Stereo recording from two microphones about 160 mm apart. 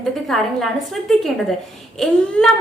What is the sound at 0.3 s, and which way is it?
A woman's voice, centre (ahead or behind).